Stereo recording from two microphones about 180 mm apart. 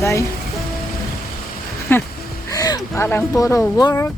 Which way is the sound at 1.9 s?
10° left (ahead or behind).